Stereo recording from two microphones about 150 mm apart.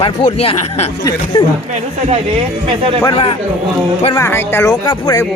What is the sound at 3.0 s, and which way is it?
Speech, 35° left (ahead or behind).